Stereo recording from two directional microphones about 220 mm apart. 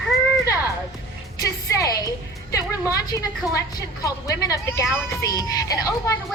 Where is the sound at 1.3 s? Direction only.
15° left (ahead or behind).